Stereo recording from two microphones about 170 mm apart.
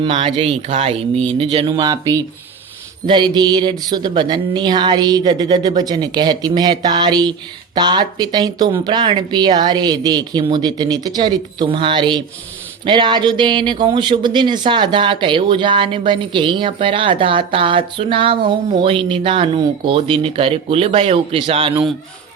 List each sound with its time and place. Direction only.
0.0 s speech: 35° right (ahead or behind)